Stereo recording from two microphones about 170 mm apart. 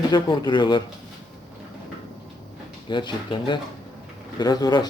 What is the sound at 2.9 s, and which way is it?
Speech, 25° left (ahead or behind).